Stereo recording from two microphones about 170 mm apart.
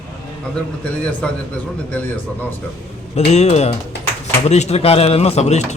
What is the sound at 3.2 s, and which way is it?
Speech, 40° left (ahead or behind).